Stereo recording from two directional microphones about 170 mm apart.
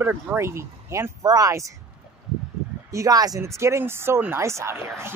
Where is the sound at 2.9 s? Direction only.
20° right (ahead or behind).